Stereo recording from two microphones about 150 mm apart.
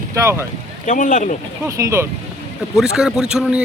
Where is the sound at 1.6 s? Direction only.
20° right (ahead or behind).